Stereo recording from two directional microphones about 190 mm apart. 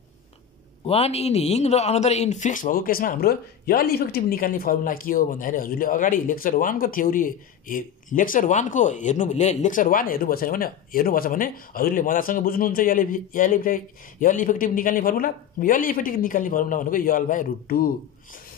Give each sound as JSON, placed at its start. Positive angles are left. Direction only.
{"t": 0.8, "sound": "a man's voice", "side_deg": 35}